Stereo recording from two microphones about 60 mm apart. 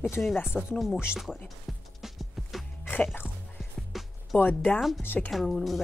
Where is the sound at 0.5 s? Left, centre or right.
Left.